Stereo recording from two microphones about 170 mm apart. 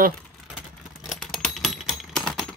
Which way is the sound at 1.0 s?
Centre (ahead or behind).